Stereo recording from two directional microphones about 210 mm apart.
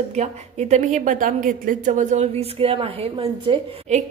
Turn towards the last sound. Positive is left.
turn(degrees=-30)  # may be behind; listen again after turning